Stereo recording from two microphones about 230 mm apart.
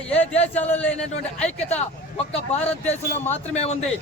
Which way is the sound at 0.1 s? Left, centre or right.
Centre.